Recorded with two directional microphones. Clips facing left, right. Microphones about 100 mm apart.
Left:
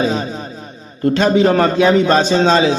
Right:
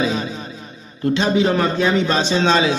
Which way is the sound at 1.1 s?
45° left (ahead or behind).